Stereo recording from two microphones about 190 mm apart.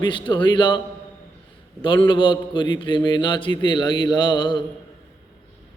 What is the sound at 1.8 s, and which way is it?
A man's voice, 25° left (ahead or behind).